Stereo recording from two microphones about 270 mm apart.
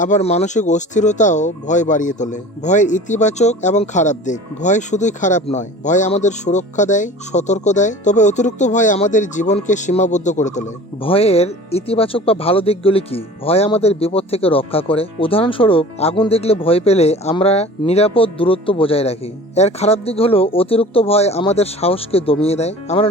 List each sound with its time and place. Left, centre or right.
0.0 s speech: left